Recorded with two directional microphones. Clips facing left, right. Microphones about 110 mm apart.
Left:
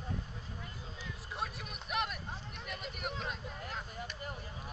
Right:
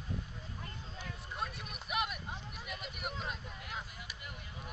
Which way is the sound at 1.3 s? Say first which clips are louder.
Left 1 dB; centre (ahead or behind).